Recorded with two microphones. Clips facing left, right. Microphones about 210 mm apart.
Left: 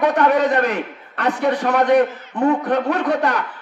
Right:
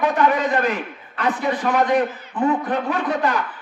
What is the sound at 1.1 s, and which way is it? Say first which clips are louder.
A man's voice: left 3 dB; 70° left (ahead or behind).